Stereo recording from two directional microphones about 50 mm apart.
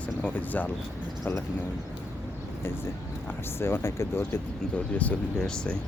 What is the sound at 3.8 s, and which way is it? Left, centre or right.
Speech, left.